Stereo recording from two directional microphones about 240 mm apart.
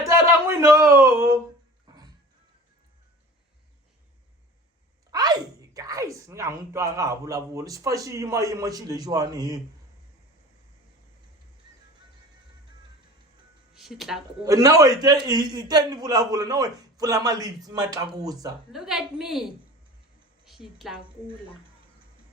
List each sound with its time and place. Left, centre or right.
0.0 s a sound: centre
5.1 s speech: centre
13.7 s speech: centre
14.4 s a man's voice: centre
18.7 s a woman's voice: centre